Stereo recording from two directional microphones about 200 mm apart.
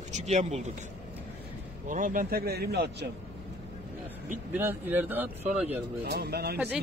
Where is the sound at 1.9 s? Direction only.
40° right (ahead or behind).